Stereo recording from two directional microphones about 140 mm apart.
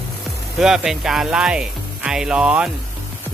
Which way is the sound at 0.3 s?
5° right (ahead or behind).